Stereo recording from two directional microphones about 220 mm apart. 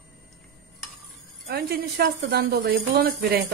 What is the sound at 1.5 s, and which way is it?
Speech, 45° right (ahead or behind).